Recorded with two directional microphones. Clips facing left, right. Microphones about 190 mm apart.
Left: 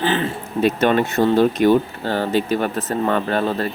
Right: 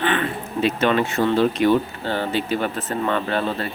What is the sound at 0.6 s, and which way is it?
Speech, 45° left (ahead or behind).